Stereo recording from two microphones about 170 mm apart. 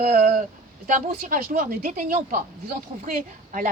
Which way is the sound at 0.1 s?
60° right (ahead or behind).